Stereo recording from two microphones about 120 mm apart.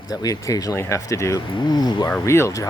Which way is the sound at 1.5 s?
35° left (ahead or behind).